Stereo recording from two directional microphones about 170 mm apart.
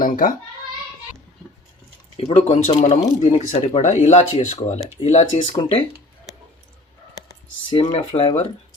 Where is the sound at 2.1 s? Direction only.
35° left (ahead or behind).